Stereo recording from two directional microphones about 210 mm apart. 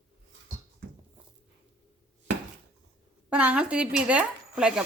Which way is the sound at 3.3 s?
5° right (ahead or behind).